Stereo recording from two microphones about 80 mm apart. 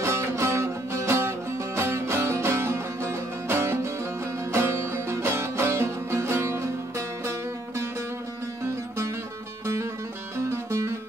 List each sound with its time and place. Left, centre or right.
0.0 s music: right
10.3 s music: right